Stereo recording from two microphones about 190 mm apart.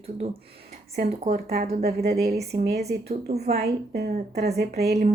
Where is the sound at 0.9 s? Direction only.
50° right (ahead or behind).